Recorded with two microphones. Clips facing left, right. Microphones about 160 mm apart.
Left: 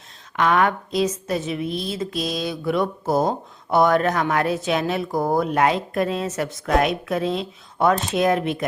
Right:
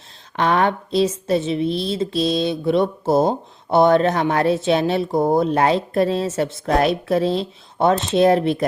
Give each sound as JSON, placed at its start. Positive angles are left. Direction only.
{"t": 0.3, "sound": "a woman's voice", "side_deg": -30}